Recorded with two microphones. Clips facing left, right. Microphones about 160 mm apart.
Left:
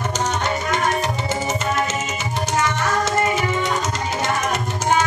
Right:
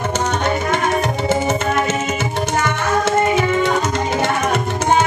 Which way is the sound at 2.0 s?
60° right (ahead or behind).